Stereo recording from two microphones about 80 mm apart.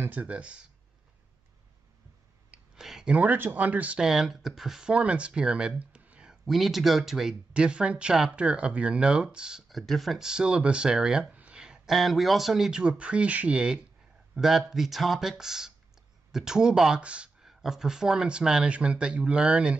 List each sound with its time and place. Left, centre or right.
0.0 s speech: centre
2.5 s speech: centre
4.0 s speech: centre
6.4 s speech: centre